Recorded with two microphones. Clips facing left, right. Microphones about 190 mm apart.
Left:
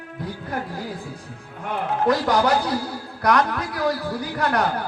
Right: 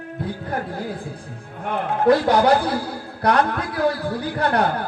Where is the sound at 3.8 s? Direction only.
60° right (ahead or behind).